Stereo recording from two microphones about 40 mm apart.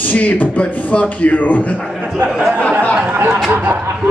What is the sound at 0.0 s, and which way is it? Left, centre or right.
Speech, left.